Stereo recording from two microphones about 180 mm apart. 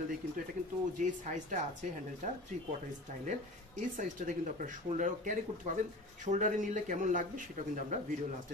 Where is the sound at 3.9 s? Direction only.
45° right (ahead or behind).